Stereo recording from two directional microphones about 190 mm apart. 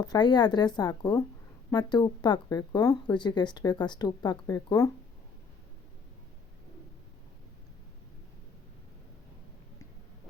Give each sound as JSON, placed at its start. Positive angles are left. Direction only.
{"t": 0.0, "sound": "speech", "side_deg": 20}